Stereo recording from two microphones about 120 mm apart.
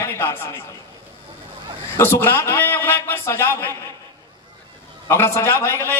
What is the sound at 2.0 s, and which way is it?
A man's voice, 20° left (ahead or behind).